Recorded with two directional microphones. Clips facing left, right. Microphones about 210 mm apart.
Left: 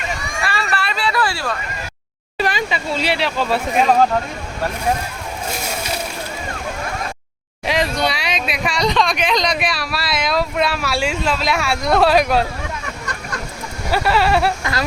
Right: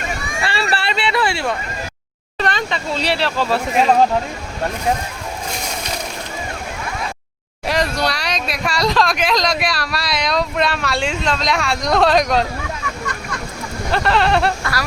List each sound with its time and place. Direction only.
0.4 s a sound: 30° right (ahead or behind)
2.4 s speech: 5° left (ahead or behind)
7.7 s speech: centre (ahead or behind)
13.9 s speech: 5° left (ahead or behind)
14.6 s speech: 20° left (ahead or behind)